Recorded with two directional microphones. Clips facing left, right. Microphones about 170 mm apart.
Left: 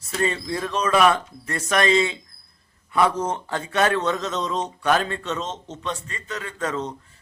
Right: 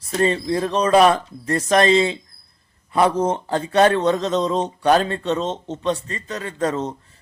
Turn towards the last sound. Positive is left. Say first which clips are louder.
# right 5 dB
turn(degrees=-35)  # may be behind; listen again after turning